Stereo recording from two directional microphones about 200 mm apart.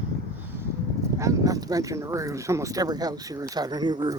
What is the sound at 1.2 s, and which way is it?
Speech, 15° right (ahead or behind).